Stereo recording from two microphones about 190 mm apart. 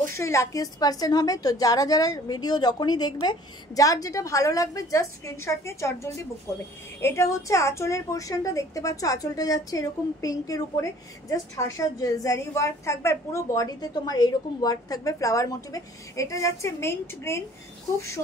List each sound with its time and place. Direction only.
0.0 s a woman's voice: 15° left (ahead or behind)